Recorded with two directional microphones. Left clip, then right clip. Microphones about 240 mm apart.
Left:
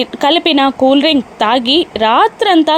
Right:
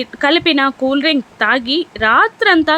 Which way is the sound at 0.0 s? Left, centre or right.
Centre.